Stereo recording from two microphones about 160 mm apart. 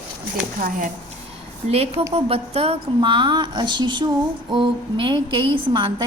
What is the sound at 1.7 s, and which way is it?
A woman's voice, 40° right (ahead or behind).